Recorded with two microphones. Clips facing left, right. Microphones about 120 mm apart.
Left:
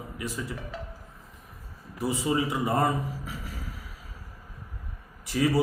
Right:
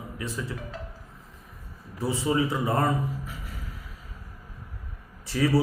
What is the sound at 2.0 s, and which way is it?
Speech, 15° left (ahead or behind).